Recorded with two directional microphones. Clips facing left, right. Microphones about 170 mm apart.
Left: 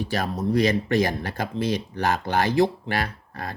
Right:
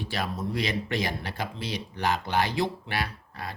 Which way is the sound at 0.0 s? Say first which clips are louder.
Left 5 dB; 40° left (ahead or behind).